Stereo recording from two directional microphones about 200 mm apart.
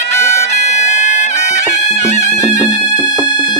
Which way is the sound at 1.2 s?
35° left (ahead or behind).